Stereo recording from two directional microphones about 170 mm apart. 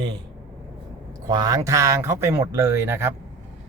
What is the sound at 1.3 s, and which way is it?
Speech, 20° right (ahead or behind).